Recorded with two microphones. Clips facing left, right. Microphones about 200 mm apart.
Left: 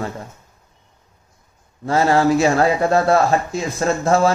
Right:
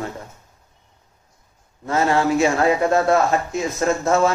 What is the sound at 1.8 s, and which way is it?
A man's voice, 35° left (ahead or behind).